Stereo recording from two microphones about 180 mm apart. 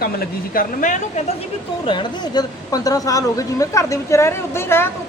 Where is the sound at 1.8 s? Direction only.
25° left (ahead or behind).